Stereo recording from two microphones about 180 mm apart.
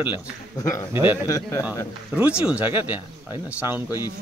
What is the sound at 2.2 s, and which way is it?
Speech, 5° right (ahead or behind).